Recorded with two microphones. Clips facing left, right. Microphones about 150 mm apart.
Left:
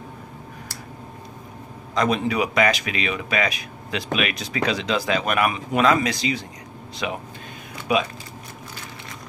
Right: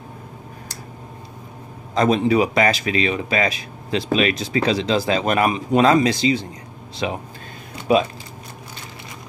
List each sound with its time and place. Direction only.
2.0 s speech: 30° right (ahead or behind)